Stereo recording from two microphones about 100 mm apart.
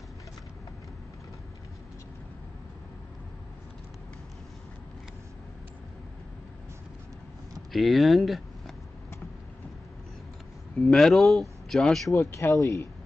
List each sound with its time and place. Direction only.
7.7 s speech: centre (ahead or behind)
10.8 s speech: 5° left (ahead or behind)
12.1 s speech: 25° left (ahead or behind)